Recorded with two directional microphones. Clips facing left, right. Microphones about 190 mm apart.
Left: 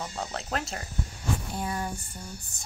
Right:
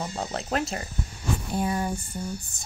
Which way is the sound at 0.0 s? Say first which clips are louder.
Right 4 dB; 25° right (ahead or behind).